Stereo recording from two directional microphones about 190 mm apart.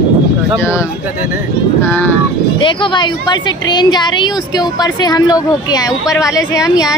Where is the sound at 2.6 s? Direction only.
25° left (ahead or behind).